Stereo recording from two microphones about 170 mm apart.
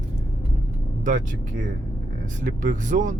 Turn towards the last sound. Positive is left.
turn(degrees=-50)  # may be behind; listen again after turning